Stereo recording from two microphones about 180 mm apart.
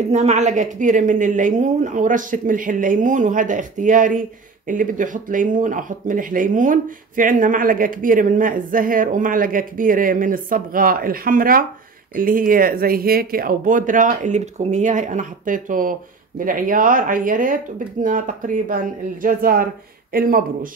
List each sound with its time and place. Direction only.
0.1 s speech: 40° right (ahead or behind); by 20.4 s 55° right (ahead or behind)